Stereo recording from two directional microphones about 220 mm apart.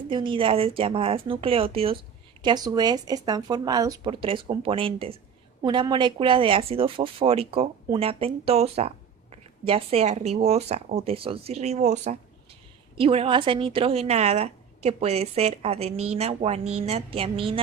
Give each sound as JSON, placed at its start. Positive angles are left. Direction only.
{"t": 0.1, "sound": "speech", "side_deg": -20}